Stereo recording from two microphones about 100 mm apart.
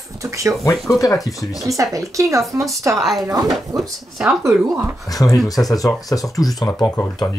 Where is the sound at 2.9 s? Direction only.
Centre (ahead or behind).